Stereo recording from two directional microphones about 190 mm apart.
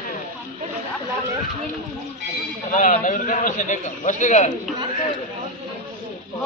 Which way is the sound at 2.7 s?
45° left (ahead or behind).